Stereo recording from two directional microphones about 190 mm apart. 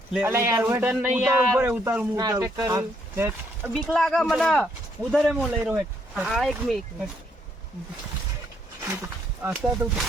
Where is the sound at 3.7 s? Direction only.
Centre (ahead or behind).